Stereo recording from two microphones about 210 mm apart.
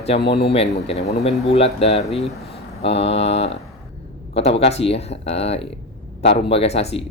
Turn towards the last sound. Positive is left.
turn(degrees=30)  # may be behind; listen again after turning